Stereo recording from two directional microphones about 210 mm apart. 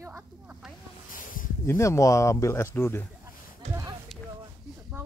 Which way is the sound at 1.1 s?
40° left (ahead or behind).